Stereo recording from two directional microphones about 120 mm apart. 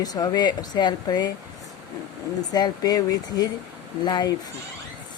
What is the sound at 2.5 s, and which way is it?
Speech, 35° left (ahead or behind).